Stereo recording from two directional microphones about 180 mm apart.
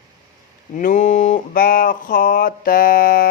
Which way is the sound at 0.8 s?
45° left (ahead or behind).